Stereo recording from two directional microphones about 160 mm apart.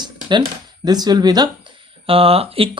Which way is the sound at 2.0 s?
35° right (ahead or behind).